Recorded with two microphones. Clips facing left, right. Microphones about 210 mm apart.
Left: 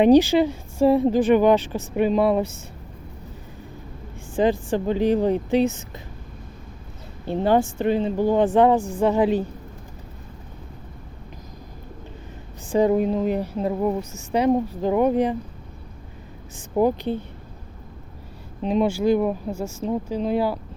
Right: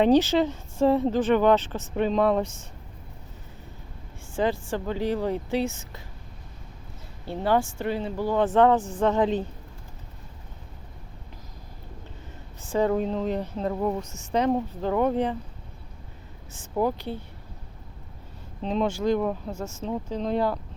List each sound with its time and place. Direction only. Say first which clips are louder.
0.0 s a woman's voice: left 5 dB; 10° left (ahead or behind)
4.4 s speech: left 6 dB; 15° left (ahead or behind)
7.3 s a woman's voice: left 5 dB; 20° left (ahead or behind)
12.6 s a woman's voice: left 5 dB; 15° left (ahead or behind)
16.6 s speech: left 6 dB; 20° left (ahead or behind)
18.6 s a woman's voice: left 5 dB; 10° left (ahead or behind)